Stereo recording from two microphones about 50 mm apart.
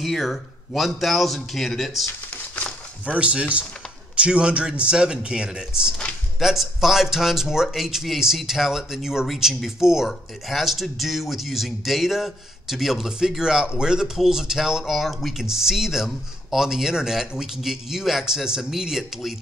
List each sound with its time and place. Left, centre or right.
0.0 s speech: centre
2.5 s a sound: left
3.2 s speech: right; by 19.3 s centre